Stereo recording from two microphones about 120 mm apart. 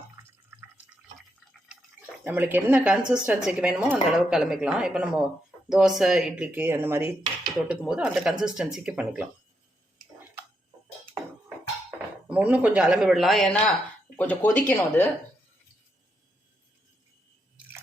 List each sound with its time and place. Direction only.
0.2 s fill: 20° right (ahead or behind)
2.2 s speech: 15° right (ahead or behind)
7.7 s speech: 5° right (ahead or behind)
12.3 s speech: 10° right (ahead or behind)
14.2 s speech: 15° left (ahead or behind)